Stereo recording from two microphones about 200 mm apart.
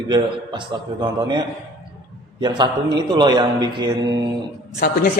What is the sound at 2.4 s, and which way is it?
A man's voice, 20° right (ahead or behind).